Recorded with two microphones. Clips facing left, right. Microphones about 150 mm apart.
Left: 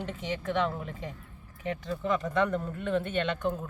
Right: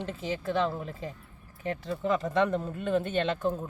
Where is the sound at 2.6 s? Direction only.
20° right (ahead or behind).